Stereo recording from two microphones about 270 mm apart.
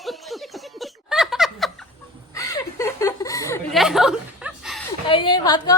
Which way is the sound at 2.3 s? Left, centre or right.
Centre.